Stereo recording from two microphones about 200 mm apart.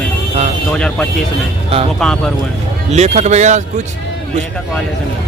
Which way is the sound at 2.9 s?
35° right (ahead or behind).